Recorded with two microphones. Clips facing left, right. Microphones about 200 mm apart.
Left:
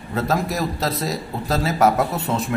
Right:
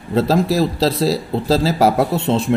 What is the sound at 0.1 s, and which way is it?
Speech, 30° right (ahead or behind).